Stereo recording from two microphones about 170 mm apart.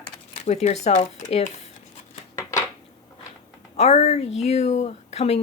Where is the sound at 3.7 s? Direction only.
40° left (ahead or behind).